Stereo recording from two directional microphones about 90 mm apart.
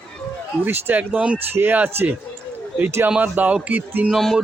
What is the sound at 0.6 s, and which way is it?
Speech, 25° right (ahead or behind).